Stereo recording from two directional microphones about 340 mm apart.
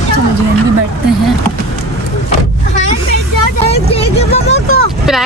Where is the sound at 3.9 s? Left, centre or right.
Centre.